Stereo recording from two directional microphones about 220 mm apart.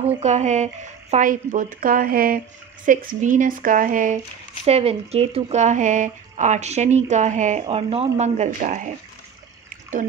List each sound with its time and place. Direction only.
0.2 s speech: 30° right (ahead or behind)
9.7 s trickle: 35° right (ahead or behind)